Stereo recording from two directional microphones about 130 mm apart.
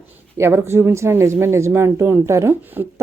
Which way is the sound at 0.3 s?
20° right (ahead or behind).